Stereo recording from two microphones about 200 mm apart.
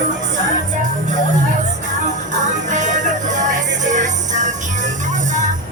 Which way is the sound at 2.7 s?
40° right (ahead or behind).